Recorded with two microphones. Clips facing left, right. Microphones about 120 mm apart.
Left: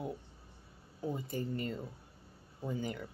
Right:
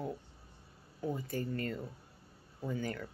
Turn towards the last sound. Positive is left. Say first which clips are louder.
# even
turn(degrees=15)  # may be behind; listen again after turning